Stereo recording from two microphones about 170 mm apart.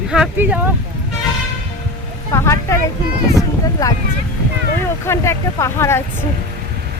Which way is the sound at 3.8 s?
20° left (ahead or behind).